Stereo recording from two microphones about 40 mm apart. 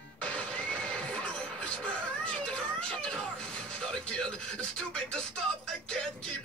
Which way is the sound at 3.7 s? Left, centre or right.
Left.